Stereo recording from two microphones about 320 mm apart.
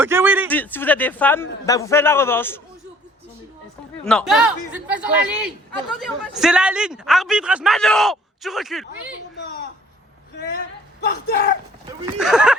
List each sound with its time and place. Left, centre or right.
0.0 s a man's voice: centre
0.5 s a man's voice: centre
4.0 s a man's voice: centre
11.0 s speech: left
12.2 s a man's voice: centre